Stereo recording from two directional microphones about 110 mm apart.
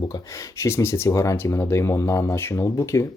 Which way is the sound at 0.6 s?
25° left (ahead or behind).